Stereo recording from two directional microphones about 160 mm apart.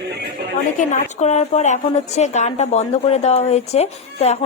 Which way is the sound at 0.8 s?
45° left (ahead or behind).